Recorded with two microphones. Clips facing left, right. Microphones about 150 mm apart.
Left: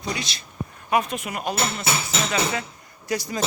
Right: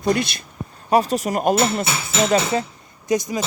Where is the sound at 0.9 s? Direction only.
35° right (ahead or behind).